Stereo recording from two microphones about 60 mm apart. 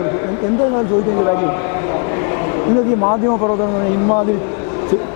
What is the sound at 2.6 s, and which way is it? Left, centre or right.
Speech, left.